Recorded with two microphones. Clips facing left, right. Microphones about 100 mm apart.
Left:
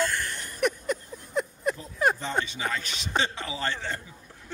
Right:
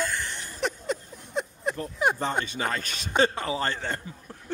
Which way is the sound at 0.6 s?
25° right (ahead or behind).